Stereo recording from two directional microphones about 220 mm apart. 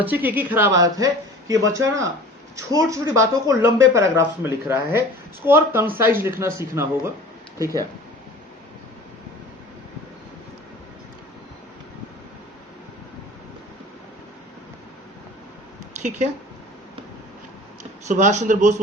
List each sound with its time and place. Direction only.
0.0 s a woman's voice: 10° right (ahead or behind)
16.0 s speech: 35° right (ahead or behind)
18.1 s speech: 35° right (ahead or behind)